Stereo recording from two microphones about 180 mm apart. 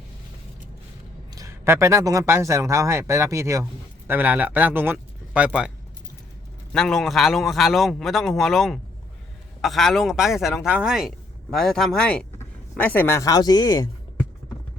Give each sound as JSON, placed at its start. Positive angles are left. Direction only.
{"t": 1.4, "sound": "speech", "side_deg": -15}
{"t": 6.7, "sound": "a man's voice", "side_deg": 0}